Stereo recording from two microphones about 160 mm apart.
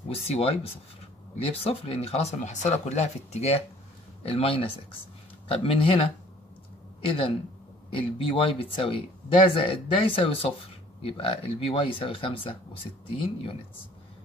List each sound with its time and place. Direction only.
0.1 s speech: 40° left (ahead or behind)
7.1 s speech: 35° left (ahead or behind)